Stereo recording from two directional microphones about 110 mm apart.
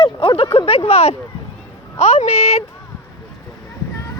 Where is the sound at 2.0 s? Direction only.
90° left.